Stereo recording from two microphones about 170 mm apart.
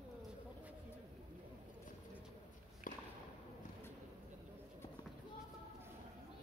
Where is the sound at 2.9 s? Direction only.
50° left (ahead or behind).